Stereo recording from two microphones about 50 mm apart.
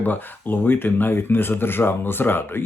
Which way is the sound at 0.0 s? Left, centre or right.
Left.